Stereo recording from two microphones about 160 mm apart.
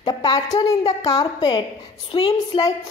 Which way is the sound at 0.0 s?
25° left (ahead or behind).